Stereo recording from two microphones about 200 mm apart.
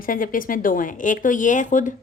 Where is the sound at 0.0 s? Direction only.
45° left (ahead or behind).